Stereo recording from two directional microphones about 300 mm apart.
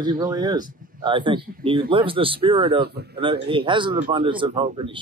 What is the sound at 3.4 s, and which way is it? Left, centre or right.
Speech, centre.